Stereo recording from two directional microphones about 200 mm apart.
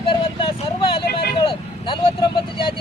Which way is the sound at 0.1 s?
25° left (ahead or behind).